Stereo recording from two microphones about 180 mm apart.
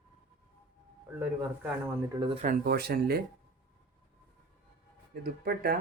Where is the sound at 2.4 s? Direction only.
55° right (ahead or behind).